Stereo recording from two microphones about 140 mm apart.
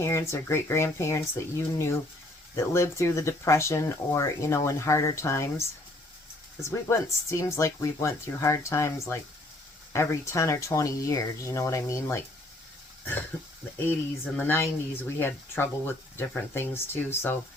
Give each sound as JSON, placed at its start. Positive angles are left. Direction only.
{"t": 0.0, "sound": "speech", "side_deg": 20}
{"t": 14.3, "sound": "speech", "side_deg": 15}